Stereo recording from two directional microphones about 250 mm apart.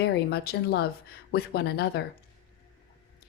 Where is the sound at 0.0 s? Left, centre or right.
Left.